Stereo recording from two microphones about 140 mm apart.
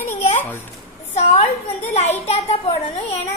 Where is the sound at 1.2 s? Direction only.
55° left (ahead or behind).